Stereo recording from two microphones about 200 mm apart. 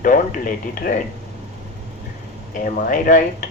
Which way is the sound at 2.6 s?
45° left (ahead or behind).